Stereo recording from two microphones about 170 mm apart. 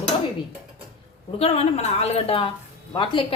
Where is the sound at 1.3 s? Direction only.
35° left (ahead or behind).